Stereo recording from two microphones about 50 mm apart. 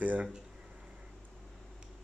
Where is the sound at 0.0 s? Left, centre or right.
Right.